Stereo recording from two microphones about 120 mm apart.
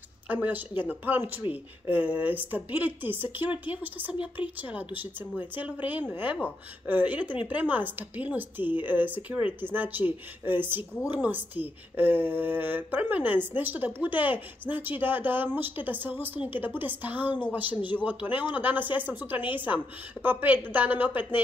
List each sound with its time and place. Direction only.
0.3 s speech: 15° right (ahead or behind)